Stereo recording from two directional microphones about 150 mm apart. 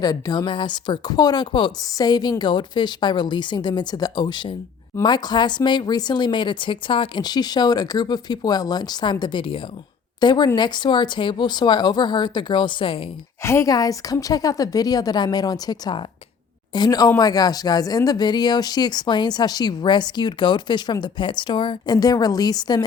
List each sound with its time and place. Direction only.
0.0 s speech: 25° left (ahead or behind)
13.4 s speech: 20° left (ahead or behind)